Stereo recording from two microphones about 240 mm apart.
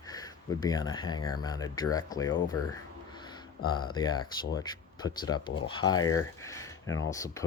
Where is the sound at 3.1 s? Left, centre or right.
Centre.